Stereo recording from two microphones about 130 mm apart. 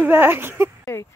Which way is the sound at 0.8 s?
25° left (ahead or behind).